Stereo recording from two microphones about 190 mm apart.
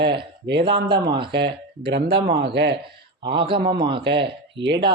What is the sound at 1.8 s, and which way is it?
Speech, 60° right (ahead or behind).